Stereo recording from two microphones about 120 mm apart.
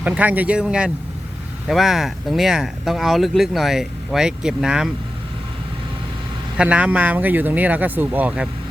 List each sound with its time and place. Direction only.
0.0 s speech: 10° right (ahead or behind)
6.6 s speech: 10° right (ahead or behind)